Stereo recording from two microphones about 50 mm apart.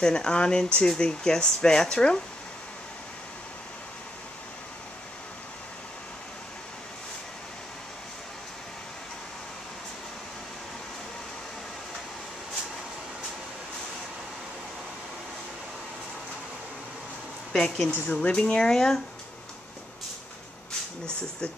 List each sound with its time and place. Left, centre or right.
0.0 s speech: centre
17.5 s speech: centre
18.1 s speech: left